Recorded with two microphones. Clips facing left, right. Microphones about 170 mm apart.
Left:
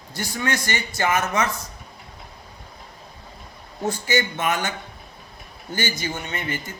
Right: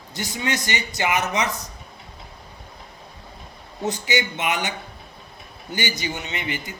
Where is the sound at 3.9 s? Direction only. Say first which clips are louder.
Left 1 dB; 20° right (ahead or behind).